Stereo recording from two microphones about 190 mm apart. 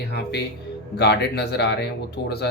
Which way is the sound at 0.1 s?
60° left (ahead or behind).